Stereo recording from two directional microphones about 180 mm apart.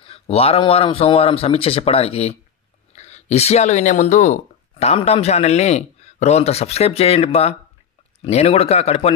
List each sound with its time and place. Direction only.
0.0 s speech: 35° left (ahead or behind)